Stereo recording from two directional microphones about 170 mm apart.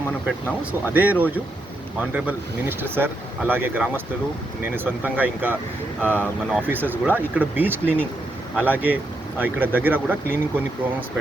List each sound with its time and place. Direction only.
0.3 s speech: 10° right (ahead or behind)